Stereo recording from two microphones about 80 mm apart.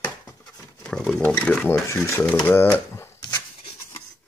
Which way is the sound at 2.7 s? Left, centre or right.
Left.